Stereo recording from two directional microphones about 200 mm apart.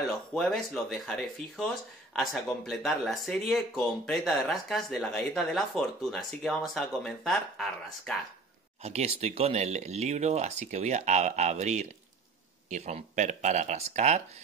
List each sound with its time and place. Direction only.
0.3 s speech: centre (ahead or behind)
8.8 s speech: 35° right (ahead or behind)